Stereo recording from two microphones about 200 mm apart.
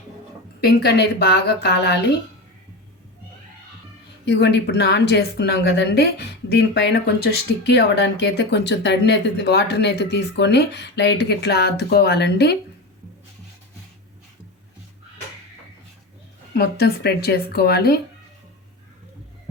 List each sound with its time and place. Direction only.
0.6 s a woman's voice: 55° left (ahead or behind)
4.3 s a woman's voice: 60° left (ahead or behind)
16.6 s speech: 50° left (ahead or behind)